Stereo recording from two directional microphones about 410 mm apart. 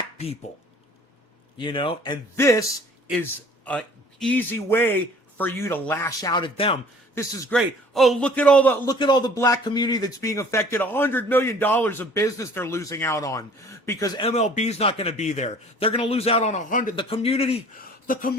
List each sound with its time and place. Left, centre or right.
1.5 s a man's voice: centre